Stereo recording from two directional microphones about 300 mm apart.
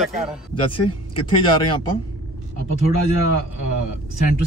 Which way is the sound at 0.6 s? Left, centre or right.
Centre.